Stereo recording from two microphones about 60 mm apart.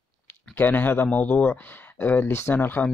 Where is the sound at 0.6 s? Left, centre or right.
Left.